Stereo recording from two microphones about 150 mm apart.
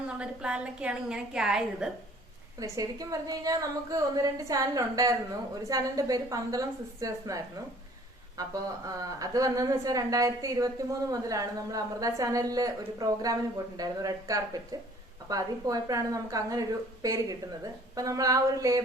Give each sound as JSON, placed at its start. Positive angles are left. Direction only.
{"t": 0.2, "sound": "a woman's voice", "side_deg": -5}
{"t": 2.6, "sound": "a woman's voice", "side_deg": -25}